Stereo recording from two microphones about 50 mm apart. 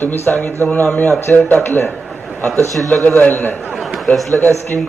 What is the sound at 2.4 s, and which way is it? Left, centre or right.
Speech, right.